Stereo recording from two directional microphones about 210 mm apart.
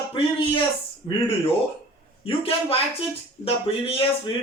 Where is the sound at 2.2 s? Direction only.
25° left (ahead or behind).